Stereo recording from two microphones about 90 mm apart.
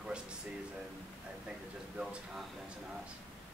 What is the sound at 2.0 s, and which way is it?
Speech, 5° right (ahead or behind).